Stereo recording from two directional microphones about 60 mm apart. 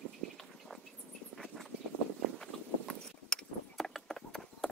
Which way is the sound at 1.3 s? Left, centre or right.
Centre.